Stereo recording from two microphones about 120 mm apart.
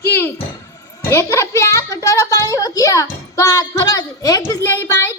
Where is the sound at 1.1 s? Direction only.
25° left (ahead or behind).